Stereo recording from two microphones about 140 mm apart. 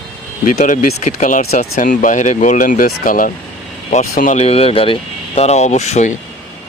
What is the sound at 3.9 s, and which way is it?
Speech, 65° left (ahead or behind).